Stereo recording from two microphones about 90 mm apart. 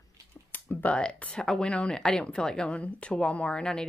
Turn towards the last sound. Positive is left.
turn(degrees=10)  # may be behind; listen again after turning